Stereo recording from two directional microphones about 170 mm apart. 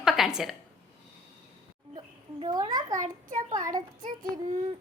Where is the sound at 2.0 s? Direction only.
25° right (ahead or behind).